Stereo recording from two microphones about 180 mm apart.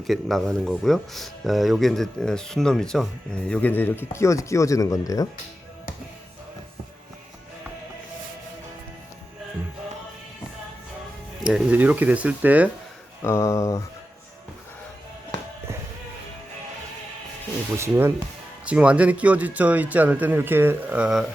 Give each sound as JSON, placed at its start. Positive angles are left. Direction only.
{"t": 0.0, "sound": "speech", "side_deg": 0}
{"t": 11.4, "sound": "speech", "side_deg": -5}
{"t": 13.2, "sound": "speech", "side_deg": 15}
{"t": 17.7, "sound": "speech", "side_deg": -15}